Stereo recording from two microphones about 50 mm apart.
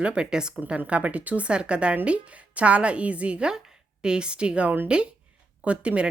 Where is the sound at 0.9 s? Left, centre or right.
Right.